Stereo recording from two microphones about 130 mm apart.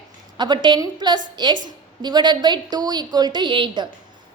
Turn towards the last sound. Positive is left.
turn(degrees=-35)  # may be behind; listen again after turning